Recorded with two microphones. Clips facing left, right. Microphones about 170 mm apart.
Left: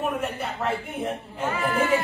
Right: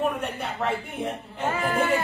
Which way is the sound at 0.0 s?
Centre (ahead or behind).